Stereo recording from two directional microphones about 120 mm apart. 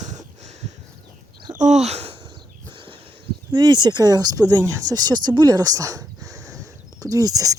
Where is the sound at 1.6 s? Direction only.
75° right (ahead or behind).